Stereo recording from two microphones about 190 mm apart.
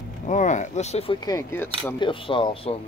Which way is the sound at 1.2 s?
15° left (ahead or behind).